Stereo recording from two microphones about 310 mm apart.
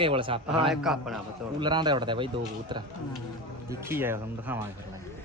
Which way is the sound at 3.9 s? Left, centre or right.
Centre.